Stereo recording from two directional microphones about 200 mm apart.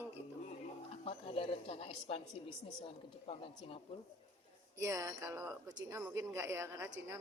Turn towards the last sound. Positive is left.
turn(degrees=-15)  # may be behind; listen again after turning